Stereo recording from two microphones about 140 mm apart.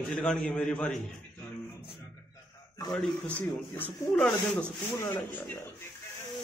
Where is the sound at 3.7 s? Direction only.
15° left (ahead or behind).